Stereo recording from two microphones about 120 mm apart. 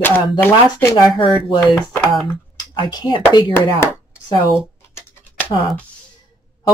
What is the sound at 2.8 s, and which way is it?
Speech, 35° left (ahead or behind).